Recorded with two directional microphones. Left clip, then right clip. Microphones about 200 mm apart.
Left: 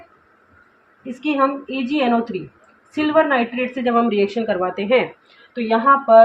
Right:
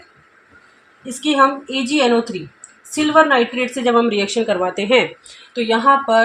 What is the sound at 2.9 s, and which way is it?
A woman's voice, 35° right (ahead or behind).